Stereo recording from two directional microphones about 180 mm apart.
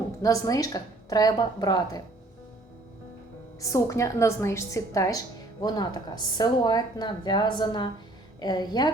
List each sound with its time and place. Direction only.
0.2 s speech: 20° left (ahead or behind)
3.6 s a woman's voice: 15° left (ahead or behind)